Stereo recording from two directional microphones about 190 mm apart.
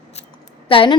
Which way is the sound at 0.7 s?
30° left (ahead or behind).